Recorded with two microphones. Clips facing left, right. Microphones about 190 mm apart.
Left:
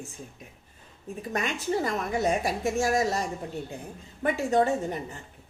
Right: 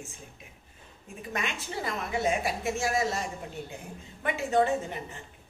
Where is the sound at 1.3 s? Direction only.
40° left (ahead or behind).